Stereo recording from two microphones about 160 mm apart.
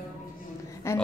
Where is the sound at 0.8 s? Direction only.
15° left (ahead or behind).